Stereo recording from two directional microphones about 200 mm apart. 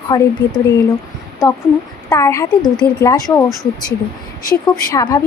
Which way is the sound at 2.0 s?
15° left (ahead or behind).